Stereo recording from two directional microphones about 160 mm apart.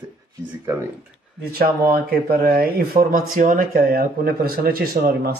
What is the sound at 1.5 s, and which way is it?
Speech, 70° right (ahead or behind).